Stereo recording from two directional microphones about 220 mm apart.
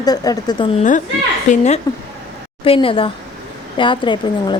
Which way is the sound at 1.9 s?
15° left (ahead or behind).